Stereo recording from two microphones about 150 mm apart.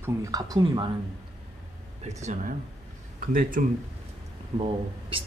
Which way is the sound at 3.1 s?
65° right (ahead or behind).